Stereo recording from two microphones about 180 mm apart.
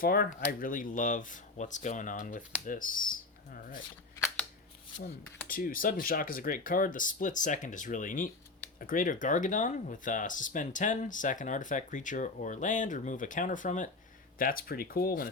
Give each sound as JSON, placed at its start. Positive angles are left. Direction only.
{"t": 0.0, "sound": "speech", "side_deg": 55}
{"t": 5.5, "sound": "speech", "side_deg": 50}